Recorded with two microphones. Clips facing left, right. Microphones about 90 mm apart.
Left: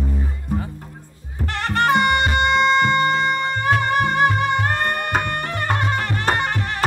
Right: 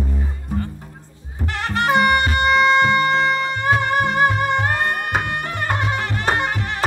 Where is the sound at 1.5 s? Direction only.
5° right (ahead or behind).